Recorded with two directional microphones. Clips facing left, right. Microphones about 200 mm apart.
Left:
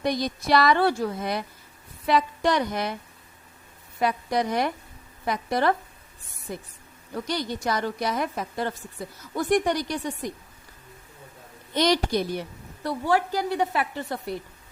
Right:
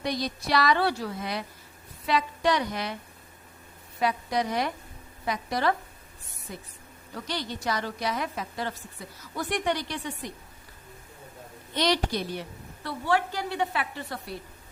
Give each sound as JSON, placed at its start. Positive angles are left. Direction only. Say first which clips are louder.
{"t": 0.0, "sound": "a woman's voice", "louder": "left 4 dB", "side_deg": 50}
{"t": 4.0, "sound": "a woman's voice", "louder": "left 2 dB", "side_deg": 50}
{"t": 7.3, "sound": "a woman's voice", "louder": "left 3 dB", "side_deg": 45}
{"t": 11.7, "sound": "a woman's voice", "louder": "left 4 dB", "side_deg": 45}